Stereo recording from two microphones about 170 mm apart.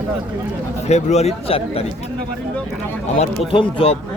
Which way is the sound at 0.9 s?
40° left (ahead or behind).